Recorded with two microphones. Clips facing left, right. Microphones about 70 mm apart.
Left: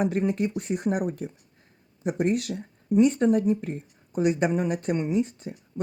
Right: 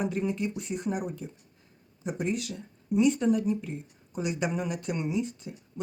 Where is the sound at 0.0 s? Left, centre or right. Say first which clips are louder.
Left 5 dB; left.